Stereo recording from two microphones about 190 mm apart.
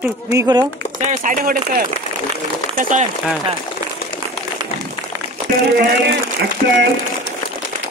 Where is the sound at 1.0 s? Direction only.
40° right (ahead or behind).